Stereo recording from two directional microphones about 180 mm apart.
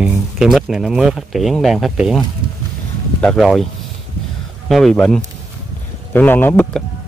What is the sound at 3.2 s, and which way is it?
Speech, centre (ahead or behind).